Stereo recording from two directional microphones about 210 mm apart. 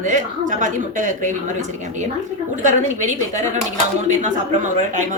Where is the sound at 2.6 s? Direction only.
35° right (ahead or behind).